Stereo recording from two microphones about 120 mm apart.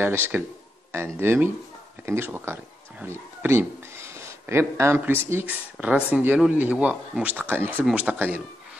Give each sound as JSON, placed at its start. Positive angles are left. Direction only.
{"t": 0.0, "sound": "speech", "side_deg": -20}